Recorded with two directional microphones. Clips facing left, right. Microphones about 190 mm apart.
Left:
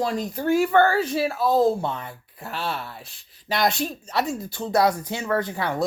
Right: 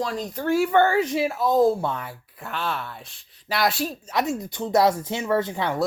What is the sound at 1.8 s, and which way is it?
Speech, 20° left (ahead or behind).